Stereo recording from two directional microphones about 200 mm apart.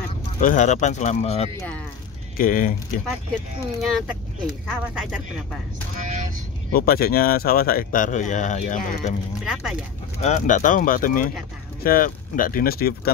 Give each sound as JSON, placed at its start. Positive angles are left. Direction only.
{"t": 0.4, "sound": "speech", "side_deg": 40}
{"t": 2.3, "sound": "speech", "side_deg": 45}
{"t": 3.8, "sound": "speech", "side_deg": 0}
{"t": 5.9, "sound": "vehicle", "side_deg": -40}
{"t": 6.7, "sound": "speech", "side_deg": 50}
{"t": 9.4, "sound": "speech", "side_deg": 0}
{"t": 10.2, "sound": "speech", "side_deg": 35}